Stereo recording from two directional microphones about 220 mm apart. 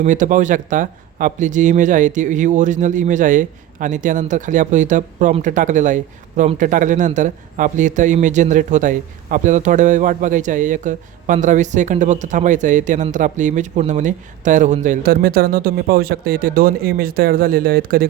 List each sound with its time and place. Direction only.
0.0 s speech: 35° right (ahead or behind)